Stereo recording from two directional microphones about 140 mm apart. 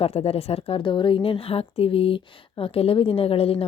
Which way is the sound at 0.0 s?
45° left (ahead or behind).